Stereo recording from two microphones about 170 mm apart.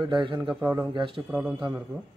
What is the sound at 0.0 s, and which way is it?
Speech, 30° right (ahead or behind).